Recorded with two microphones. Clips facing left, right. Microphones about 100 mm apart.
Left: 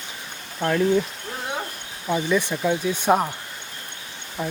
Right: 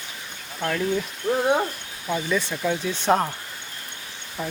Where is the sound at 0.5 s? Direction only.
20° left (ahead or behind).